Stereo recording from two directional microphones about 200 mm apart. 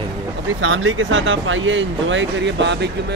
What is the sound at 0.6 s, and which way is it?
Speech, 75° right (ahead or behind).